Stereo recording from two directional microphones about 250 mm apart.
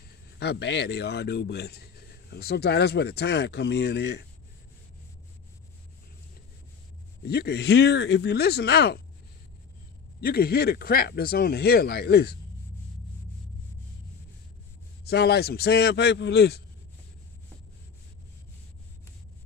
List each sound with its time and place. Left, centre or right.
0.4 s speech: left
7.2 s speech: left
10.2 s speech: left
15.0 s speech: left